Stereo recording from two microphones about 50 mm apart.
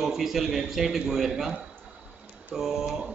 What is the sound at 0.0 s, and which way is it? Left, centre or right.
A man's voice, centre.